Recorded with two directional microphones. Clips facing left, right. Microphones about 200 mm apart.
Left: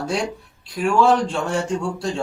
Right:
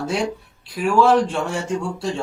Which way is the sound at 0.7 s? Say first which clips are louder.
Right 1 dB; centre (ahead or behind).